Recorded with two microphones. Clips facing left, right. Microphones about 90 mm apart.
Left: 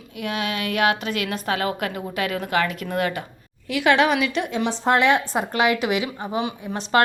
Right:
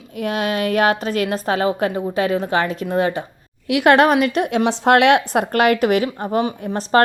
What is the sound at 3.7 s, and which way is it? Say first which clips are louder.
Speech: right 5 dB; 55° right (ahead or behind).